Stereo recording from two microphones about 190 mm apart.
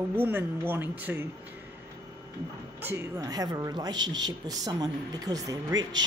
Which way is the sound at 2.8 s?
10° right (ahead or behind).